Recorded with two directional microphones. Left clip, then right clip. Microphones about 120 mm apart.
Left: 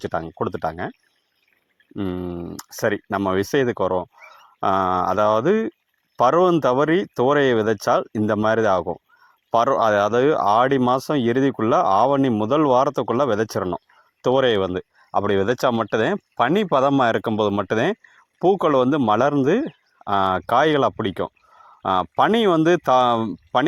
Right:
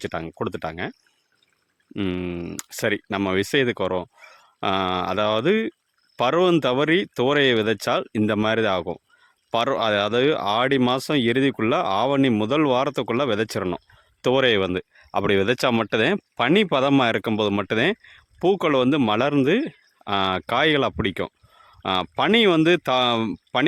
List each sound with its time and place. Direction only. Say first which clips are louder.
0.0 s speech: left 3 dB; 10° right (ahead or behind)
2.0 s speech: even; 20° right (ahead or behind)
8.2 s speech: left 1 dB; 20° right (ahead or behind)
8.4 s speech: left 7 dB; 10° right (ahead or behind)